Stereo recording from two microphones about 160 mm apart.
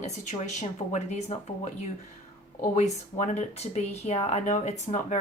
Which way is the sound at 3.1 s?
45° left (ahead or behind).